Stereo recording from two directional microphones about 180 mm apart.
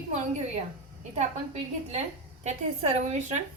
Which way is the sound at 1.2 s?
40° right (ahead or behind).